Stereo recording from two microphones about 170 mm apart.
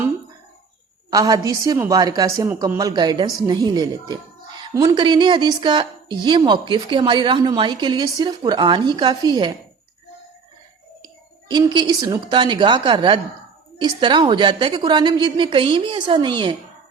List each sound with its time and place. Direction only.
1.1 s a woman's voice: 20° right (ahead or behind)
11.0 s a woman's voice: 25° right (ahead or behind)